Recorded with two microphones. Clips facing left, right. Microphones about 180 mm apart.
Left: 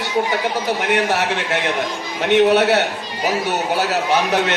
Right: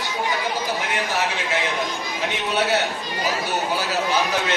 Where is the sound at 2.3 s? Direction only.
65° left (ahead or behind).